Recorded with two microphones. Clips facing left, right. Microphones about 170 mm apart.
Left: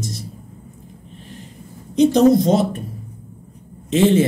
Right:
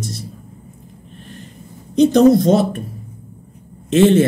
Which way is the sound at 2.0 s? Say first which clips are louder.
Right 2 dB; 65° right (ahead or behind).